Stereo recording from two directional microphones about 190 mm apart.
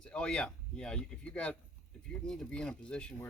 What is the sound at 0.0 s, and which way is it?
Speech, 5° left (ahead or behind).